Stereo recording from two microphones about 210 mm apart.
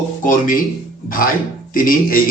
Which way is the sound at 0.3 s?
40° left (ahead or behind).